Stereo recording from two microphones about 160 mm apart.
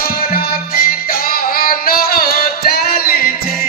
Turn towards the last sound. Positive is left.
turn(degrees=70)  # may be behind; listen again after turning